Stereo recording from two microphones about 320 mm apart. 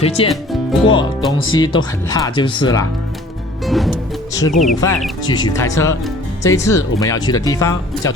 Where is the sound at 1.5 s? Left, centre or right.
Centre.